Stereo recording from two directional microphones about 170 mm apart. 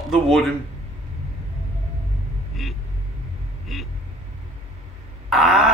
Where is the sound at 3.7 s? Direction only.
Centre (ahead or behind).